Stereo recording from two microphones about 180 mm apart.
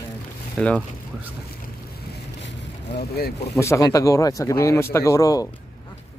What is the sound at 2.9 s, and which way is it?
Speech, 60° left (ahead or behind).